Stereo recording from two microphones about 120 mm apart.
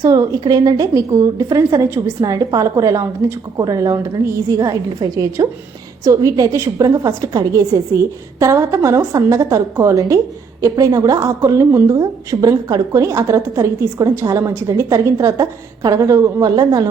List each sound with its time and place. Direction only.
0.0 s a woman's voice: 30° right (ahead or behind)